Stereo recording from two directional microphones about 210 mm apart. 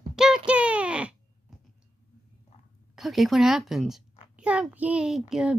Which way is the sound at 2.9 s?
Centre (ahead or behind).